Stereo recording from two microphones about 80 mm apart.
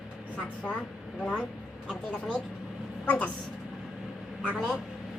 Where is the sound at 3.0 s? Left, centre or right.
Centre.